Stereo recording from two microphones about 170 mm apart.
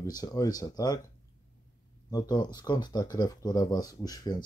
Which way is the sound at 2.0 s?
25° left (ahead or behind).